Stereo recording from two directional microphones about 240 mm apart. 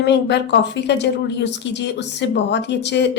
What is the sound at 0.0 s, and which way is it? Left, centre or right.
A woman's voice, left.